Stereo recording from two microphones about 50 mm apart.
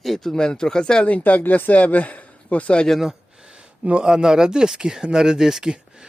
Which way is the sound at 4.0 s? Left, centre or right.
Centre.